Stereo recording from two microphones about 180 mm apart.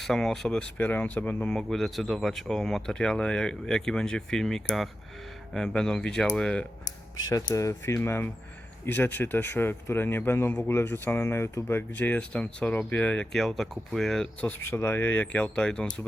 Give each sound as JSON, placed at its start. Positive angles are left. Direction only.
{"t": 0.0, "sound": "speech", "side_deg": 0}
{"t": 7.3, "sound": "speech", "side_deg": 20}